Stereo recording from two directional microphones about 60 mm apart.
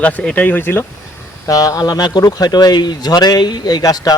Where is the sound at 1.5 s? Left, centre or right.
Left.